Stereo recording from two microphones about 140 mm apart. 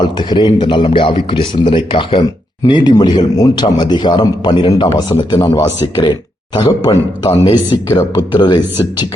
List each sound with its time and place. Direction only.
0.0 s speech: 35° left (ahead or behind)